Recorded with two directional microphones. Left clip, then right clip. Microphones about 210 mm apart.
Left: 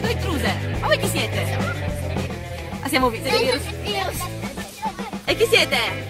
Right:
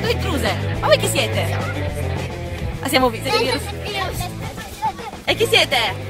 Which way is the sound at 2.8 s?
25° right (ahead or behind).